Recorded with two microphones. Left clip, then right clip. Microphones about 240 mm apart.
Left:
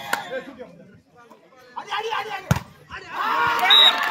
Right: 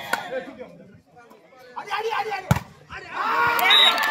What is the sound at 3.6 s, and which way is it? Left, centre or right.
Speech, centre.